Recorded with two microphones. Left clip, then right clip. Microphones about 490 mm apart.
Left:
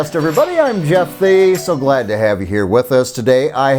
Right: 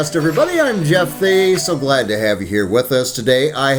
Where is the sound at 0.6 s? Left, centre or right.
Left.